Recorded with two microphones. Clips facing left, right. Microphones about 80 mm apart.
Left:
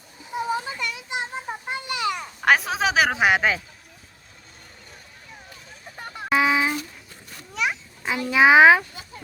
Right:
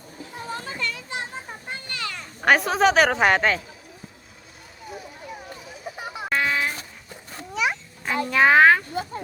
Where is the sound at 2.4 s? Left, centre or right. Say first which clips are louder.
Right 2 dB; centre.